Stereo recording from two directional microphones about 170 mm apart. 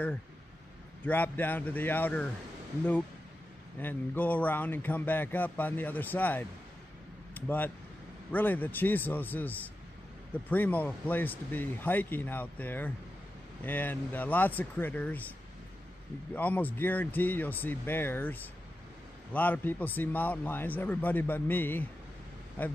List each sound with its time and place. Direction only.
1.0 s speech: 10° left (ahead or behind)
3.8 s speech: 10° left (ahead or behind)
16.3 s speech: 10° left (ahead or behind)